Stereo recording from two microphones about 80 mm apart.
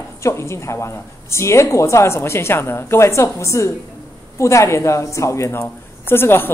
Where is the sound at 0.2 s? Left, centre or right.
Left.